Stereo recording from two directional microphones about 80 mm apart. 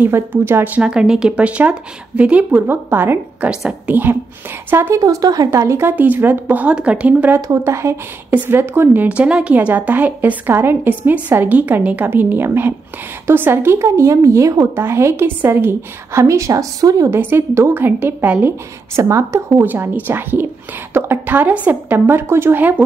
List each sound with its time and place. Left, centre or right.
0.0 s a woman's voice: right
0.7 s speech: centre; by 3.4 s right
3.4 s speech: centre
3.9 s a woman's voice: right
4.9 s speech: right
5.5 s a woman's voice: right
5.9 s a woman's voice: right
7.5 s a woman's voice: right
14.8 s a woman's voice: right
17.1 s a woman's voice: right
18.9 s a woman's voice: right
19.6 s a woman's voice: right